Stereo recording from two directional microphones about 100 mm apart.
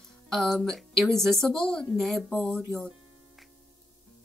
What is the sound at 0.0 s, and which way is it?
Speech, 5° left (ahead or behind).